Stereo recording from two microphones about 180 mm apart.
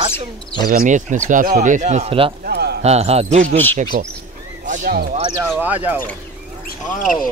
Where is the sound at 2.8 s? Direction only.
35° right (ahead or behind).